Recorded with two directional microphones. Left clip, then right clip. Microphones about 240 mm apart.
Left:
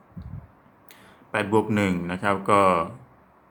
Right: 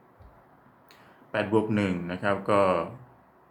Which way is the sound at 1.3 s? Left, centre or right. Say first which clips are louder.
Left 3 dB; left.